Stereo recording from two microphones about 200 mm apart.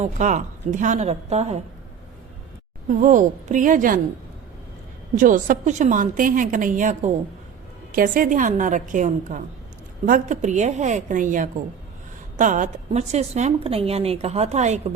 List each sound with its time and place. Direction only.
0.0 s a woman's voice: 35° right (ahead or behind)
3.0 s a woman's voice: 40° right (ahead or behind)
5.1 s a woman's voice: 40° right (ahead or behind)